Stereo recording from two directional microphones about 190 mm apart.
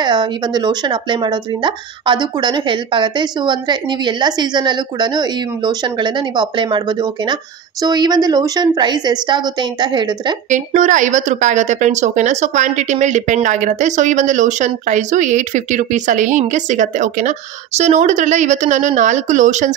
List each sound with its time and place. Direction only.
0.0 s speech: 25° right (ahead or behind)
10.5 s a woman's voice: 40° right (ahead or behind)